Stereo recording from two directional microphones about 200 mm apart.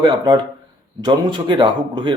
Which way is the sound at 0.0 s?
20° right (ahead or behind).